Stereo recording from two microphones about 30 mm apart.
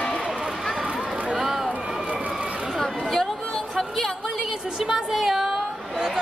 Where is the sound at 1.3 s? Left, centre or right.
Centre.